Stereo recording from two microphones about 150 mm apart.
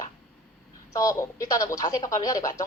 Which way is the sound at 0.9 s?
25° left (ahead or behind).